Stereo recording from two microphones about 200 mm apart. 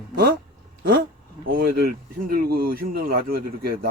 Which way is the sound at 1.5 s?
45° right (ahead or behind).